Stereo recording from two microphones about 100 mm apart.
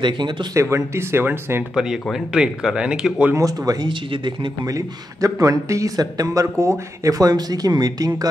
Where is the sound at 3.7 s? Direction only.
45° right (ahead or behind).